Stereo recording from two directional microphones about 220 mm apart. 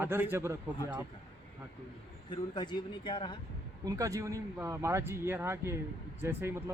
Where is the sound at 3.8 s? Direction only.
15° right (ahead or behind).